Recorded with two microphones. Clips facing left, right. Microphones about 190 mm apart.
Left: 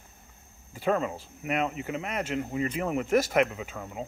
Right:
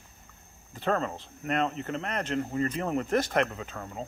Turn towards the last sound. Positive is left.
turn(degrees=10)  # may be behind; listen again after turning